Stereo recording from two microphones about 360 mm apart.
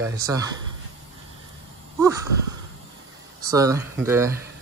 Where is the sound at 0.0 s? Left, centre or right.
Centre.